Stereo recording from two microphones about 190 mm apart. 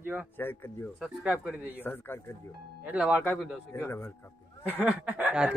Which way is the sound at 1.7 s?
10° left (ahead or behind).